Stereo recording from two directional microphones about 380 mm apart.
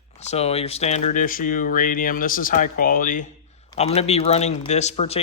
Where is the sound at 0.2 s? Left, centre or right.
Centre.